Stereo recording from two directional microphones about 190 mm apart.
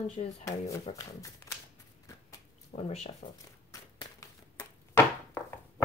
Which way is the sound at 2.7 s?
35° left (ahead or behind).